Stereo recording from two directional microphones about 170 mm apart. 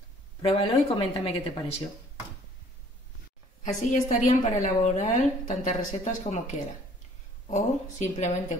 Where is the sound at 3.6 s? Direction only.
45° left (ahead or behind).